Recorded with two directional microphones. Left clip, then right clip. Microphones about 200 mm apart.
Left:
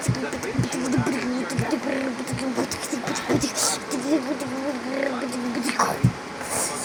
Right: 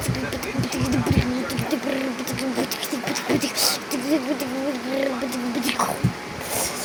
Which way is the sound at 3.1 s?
10° right (ahead or behind).